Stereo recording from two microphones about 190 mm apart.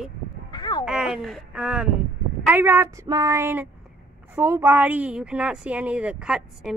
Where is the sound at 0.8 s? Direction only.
5° right (ahead or behind).